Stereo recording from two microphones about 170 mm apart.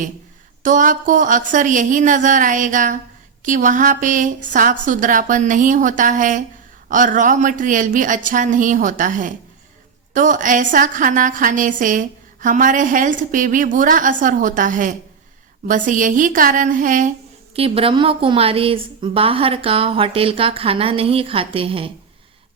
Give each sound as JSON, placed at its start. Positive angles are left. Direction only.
{"t": 0.6, "sound": "a woman's voice", "side_deg": -50}
{"t": 17.5, "sound": "a woman's voice", "side_deg": -35}